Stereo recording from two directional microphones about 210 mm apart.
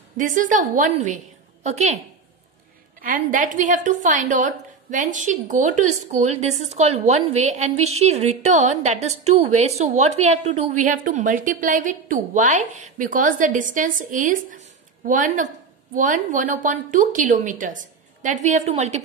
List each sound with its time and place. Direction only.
0.2 s a woman's voice: 40° right (ahead or behind)
3.0 s a woman's voice: 40° right (ahead or behind)